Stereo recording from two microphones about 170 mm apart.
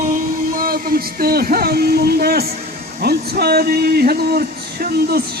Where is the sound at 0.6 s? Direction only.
60° right (ahead or behind).